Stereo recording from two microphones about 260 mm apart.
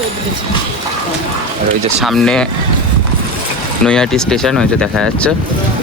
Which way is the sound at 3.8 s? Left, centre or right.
Centre.